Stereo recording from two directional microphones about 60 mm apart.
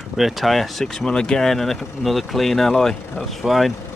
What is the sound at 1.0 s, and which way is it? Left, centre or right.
Speech, centre.